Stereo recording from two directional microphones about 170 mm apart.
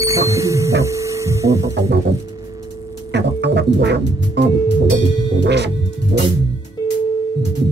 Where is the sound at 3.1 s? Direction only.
90° right.